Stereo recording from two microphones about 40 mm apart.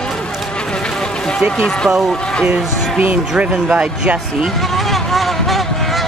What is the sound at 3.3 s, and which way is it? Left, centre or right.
Speech, right.